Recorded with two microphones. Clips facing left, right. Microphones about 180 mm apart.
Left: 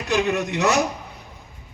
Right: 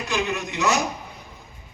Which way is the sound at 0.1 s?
65° left (ahead or behind).